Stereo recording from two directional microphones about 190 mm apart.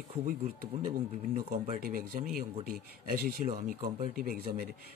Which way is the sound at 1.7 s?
50° right (ahead or behind).